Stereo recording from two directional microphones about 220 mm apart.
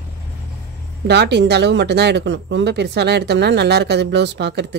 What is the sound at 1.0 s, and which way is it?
Speech, 50° right (ahead or behind).